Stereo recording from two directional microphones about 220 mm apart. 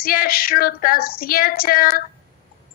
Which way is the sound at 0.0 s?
40° left (ahead or behind).